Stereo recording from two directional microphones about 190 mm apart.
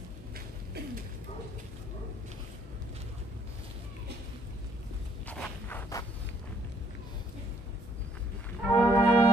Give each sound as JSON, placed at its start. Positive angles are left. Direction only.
{"t": 5.2, "sound": "walk", "side_deg": 5}
{"t": 8.7, "sound": "brass instrument", "side_deg": 20}